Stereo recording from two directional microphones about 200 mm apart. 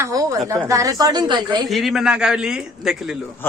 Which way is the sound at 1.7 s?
Centre (ahead or behind).